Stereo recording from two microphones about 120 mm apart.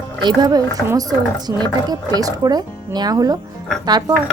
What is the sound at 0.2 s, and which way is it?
Speech, 35° right (ahead or behind).